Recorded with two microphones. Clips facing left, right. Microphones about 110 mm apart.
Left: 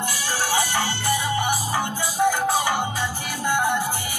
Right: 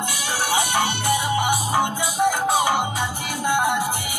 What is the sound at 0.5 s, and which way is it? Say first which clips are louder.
Music: right 3 dB; 20° right (ahead or behind).